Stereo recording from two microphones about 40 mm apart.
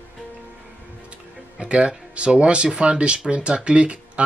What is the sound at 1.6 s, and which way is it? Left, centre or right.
Speech, right.